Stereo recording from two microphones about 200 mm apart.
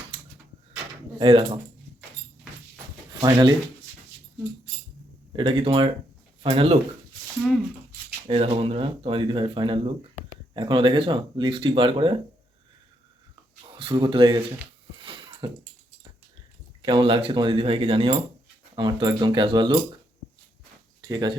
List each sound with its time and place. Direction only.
1.2 s speech: 25° right (ahead or behind)
3.2 s speech: 20° right (ahead or behind)
5.4 s speech: 25° right (ahead or behind)
8.3 s speech: 30° right (ahead or behind)
13.7 s speech: 25° right (ahead or behind)
15.0 s a sound: 25° right (ahead or behind)
16.8 s speech: 25° right (ahead or behind)
21.1 s speech: 20° right (ahead or behind)